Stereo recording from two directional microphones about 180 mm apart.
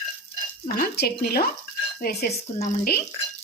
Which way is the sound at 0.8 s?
60° left (ahead or behind).